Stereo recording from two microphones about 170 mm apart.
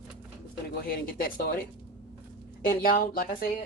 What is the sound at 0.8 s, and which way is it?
Speech, 60° left (ahead or behind).